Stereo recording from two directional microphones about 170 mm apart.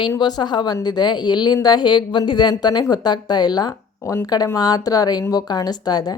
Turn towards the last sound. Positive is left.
turn(degrees=25)  # may be behind; listen again after turning